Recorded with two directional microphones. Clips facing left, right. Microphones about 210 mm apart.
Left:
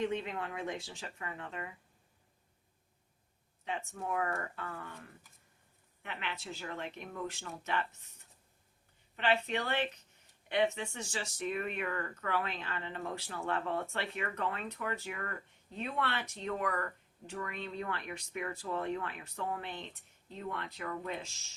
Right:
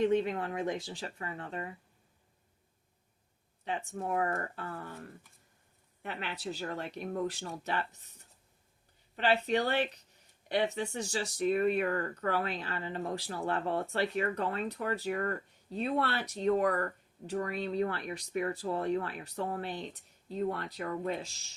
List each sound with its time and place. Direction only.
0.0 s speech: 35° right (ahead or behind)
3.6 s speech: 35° right (ahead or behind)
6.0 s speech: 40° right (ahead or behind)